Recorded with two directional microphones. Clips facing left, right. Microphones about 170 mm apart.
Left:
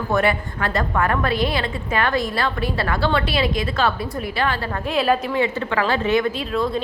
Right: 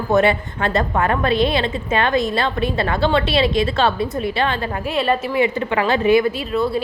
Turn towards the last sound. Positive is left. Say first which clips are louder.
# right 2 dB
turn(degrees=-5)  # may be behind; listen again after turning